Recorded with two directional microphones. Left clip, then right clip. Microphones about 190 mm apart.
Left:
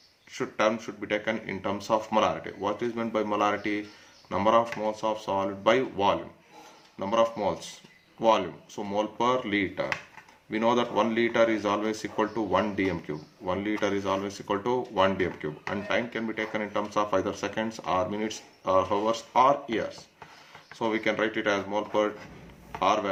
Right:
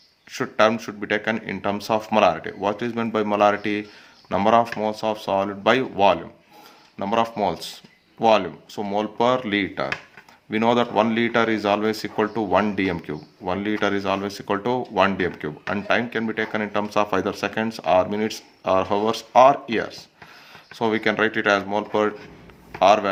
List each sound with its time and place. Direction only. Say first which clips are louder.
0.3 s speech: right 7 dB; 45° right (ahead or behind)